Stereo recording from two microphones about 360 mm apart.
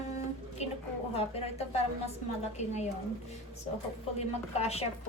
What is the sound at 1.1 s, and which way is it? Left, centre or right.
A woman's voice, centre.